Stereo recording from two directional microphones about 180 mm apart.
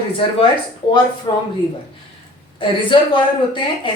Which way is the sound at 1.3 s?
25° left (ahead or behind).